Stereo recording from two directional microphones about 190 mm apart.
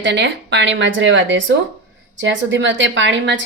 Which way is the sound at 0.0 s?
65° right (ahead or behind).